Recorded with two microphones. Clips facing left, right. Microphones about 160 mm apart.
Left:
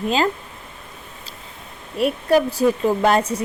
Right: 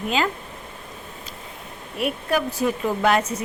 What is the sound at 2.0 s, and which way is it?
Speech, 35° left (ahead or behind).